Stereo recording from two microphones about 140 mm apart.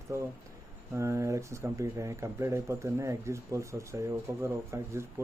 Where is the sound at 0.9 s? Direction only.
20° right (ahead or behind).